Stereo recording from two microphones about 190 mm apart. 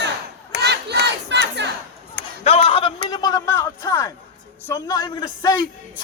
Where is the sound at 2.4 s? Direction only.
30° left (ahead or behind).